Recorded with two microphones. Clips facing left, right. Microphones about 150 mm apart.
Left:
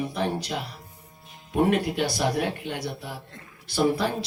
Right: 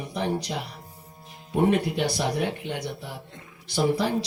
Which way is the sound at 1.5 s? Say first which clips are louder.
Even; 20° right (ahead or behind).